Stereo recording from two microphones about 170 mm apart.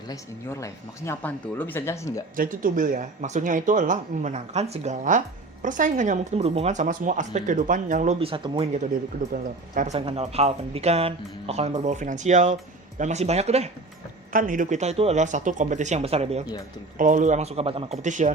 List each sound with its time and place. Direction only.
0.1 s speech: 15° left (ahead or behind)
2.3 s speech: 55° right (ahead or behind)
14.3 s speech: 50° right (ahead or behind)
17.0 s speech: 50° right (ahead or behind)